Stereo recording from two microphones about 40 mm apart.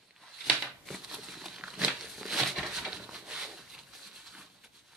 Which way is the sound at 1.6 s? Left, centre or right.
Centre.